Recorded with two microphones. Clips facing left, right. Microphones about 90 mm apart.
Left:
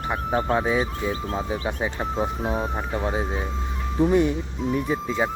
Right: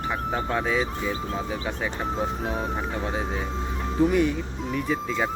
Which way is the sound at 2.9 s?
20° left (ahead or behind).